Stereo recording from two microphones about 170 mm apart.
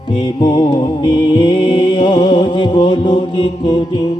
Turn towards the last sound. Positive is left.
turn(degrees=25)  # may be behind; listen again after turning